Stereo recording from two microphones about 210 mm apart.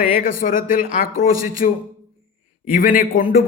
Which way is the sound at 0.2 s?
40° left (ahead or behind).